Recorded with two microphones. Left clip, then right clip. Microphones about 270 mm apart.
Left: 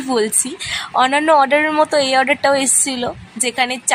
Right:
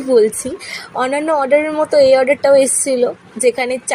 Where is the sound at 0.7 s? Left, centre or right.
Centre.